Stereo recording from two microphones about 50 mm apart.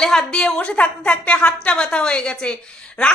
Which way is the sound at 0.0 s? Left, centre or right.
Centre.